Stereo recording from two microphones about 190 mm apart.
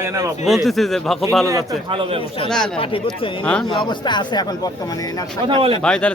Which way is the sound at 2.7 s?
30° left (ahead or behind).